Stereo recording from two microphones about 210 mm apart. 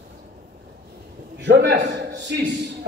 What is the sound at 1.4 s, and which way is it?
A man's voice, 55° right (ahead or behind).